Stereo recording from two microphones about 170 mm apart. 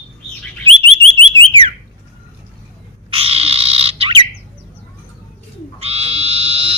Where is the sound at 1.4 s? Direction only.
30° right (ahead or behind).